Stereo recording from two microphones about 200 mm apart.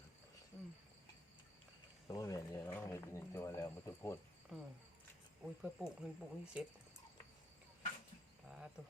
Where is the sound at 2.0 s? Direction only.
15° left (ahead or behind).